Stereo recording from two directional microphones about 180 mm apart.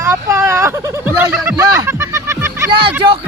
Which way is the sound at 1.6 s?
15° right (ahead or behind).